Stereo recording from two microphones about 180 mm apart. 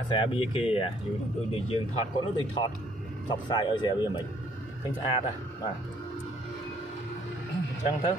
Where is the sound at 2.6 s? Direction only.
20° left (ahead or behind).